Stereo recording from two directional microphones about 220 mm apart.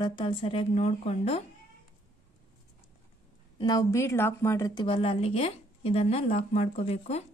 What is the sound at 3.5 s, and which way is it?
A woman's voice, 20° left (ahead or behind).